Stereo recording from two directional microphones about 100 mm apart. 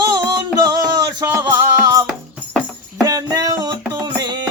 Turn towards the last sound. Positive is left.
turn(degrees=-45)  # may be behind; listen again after turning